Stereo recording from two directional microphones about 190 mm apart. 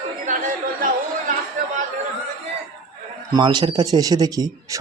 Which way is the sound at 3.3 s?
25° right (ahead or behind).